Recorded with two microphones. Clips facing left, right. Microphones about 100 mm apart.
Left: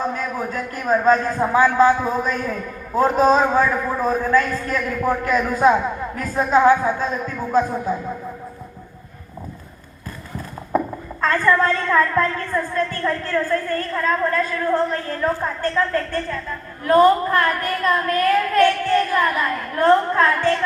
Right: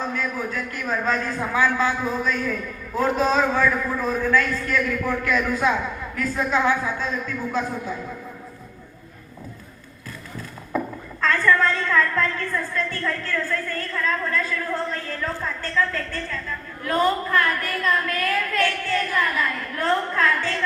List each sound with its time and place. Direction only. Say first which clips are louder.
0.0 s a woman's voice: left 3 dB; 40° left (ahead or behind)
10.7 s a sound: left 5 dB; 40° left (ahead or behind)
11.2 s a woman's voice: left 2 dB; 45° left (ahead or behind)